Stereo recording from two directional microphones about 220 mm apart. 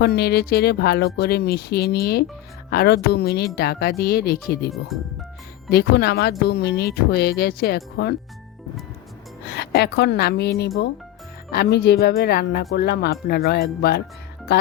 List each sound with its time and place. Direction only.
0.0 s speech: 45° left (ahead or behind)
4.9 s speech: centre (ahead or behind)
5.7 s speech: 45° left (ahead or behind)
9.5 s speech: 50° left (ahead or behind)